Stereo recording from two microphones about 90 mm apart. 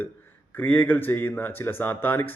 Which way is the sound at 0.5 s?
20° left (ahead or behind).